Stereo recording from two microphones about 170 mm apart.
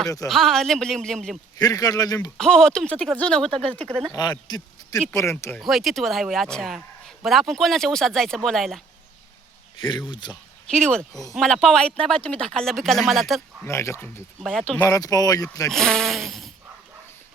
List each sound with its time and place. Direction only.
0.3 s a man's voice: centre (ahead or behind)
1.5 s speech: 20° left (ahead or behind)
2.4 s a man's voice: 5° left (ahead or behind)
4.1 s speech: 25° left (ahead or behind)
5.5 s a man's voice: centre (ahead or behind)
9.8 s speech: 25° left (ahead or behind)
10.7 s a man's voice: 5° left (ahead or behind)
13.7 s speech: 15° left (ahead or behind)
14.4 s a man's voice: centre (ahead or behind)
14.8 s speech: 20° left (ahead or behind)
15.7 s a man's voice: 5° left (ahead or behind)